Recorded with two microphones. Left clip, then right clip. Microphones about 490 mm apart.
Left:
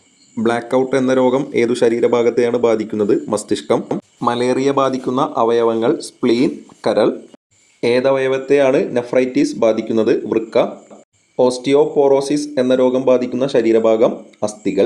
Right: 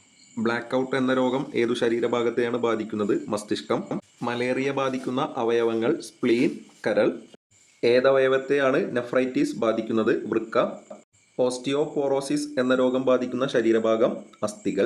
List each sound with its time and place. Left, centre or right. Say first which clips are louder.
0.3 s speech: left 9 dB; right